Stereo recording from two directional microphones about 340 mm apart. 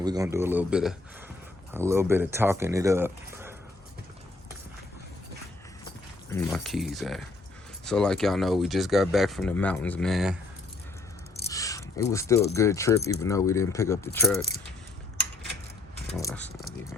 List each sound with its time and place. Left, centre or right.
0.0 s speech: centre
6.3 s speech: centre
11.4 s speech: centre
16.1 s keys jangling: centre